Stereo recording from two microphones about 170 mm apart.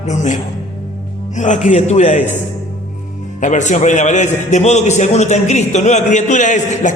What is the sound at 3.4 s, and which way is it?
A man's voice, 45° left (ahead or behind).